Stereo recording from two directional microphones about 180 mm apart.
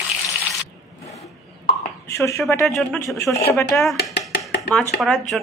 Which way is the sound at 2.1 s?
15° left (ahead or behind).